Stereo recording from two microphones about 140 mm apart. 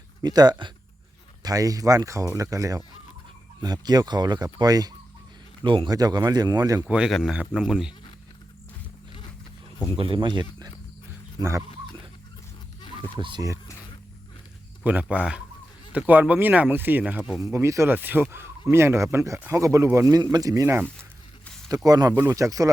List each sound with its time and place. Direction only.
0.2 s speech: 30° right (ahead or behind)
6.8 s speech: 5° right (ahead or behind)
10.0 s speech: 35° right (ahead or behind)
11.3 s speech: 20° right (ahead or behind)
13.1 s speech: 35° right (ahead or behind)
15.1 s speech: 5° right (ahead or behind)
17.4 s speech: 20° right (ahead or behind)
21.8 s speech: 25° right (ahead or behind)
22.1 s speech: 15° right (ahead or behind)